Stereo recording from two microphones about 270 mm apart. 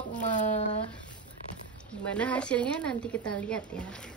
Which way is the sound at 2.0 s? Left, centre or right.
Centre.